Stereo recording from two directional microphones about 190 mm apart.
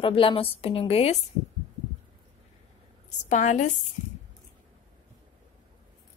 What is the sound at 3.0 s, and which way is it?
Speech, 40° left (ahead or behind).